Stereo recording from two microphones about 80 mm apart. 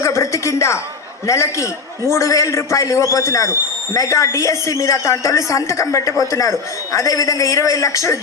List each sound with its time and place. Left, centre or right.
0.0 s a woman's voice: left